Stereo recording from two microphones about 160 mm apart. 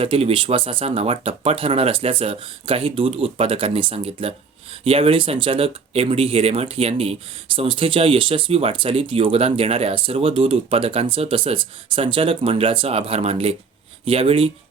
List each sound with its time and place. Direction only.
0.0 s speech: 35° right (ahead or behind)